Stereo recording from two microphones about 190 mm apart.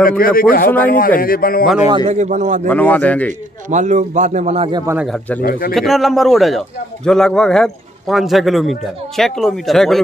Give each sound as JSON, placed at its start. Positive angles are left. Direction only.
{"t": 0.2, "sound": "a man's voice", "side_deg": 50}
{"t": 1.9, "sound": "a man's voice", "side_deg": -30}
{"t": 2.7, "sound": "speech", "side_deg": 10}
{"t": 3.7, "sound": "a man's voice", "side_deg": -40}
{"t": 5.0, "sound": "a man's voice", "side_deg": 0}
{"t": 5.4, "sound": "a man's voice", "side_deg": 50}
{"t": 5.8, "sound": "a man's voice", "side_deg": 0}